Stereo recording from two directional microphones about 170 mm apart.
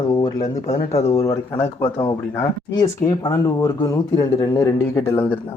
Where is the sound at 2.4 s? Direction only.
20° left (ahead or behind).